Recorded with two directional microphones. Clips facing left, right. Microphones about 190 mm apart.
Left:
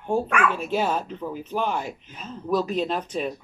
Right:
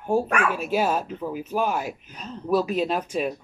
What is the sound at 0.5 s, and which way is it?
Speech, 10° right (ahead or behind).